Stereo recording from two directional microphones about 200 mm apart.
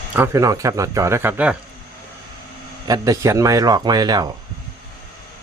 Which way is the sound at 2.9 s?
15° right (ahead or behind).